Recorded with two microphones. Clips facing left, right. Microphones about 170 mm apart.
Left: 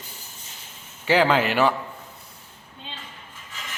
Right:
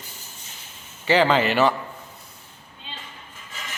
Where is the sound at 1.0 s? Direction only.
10° left (ahead or behind).